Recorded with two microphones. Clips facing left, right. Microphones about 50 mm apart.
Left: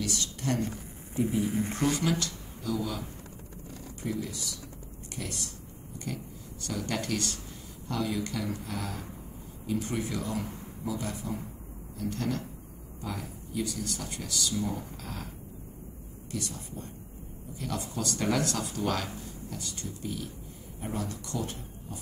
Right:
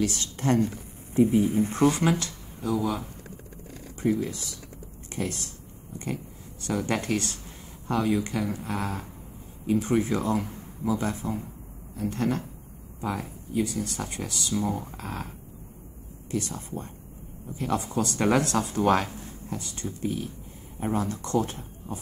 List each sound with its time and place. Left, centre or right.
0.0 s speech: right
4.0 s speech: right
6.6 s speech: right
9.8 s speech: right
10.0 s a man's voice: right
12.0 s speech: right
16.3 s speech: right